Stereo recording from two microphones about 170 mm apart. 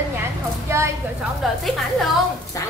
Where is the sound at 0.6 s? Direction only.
15° right (ahead or behind).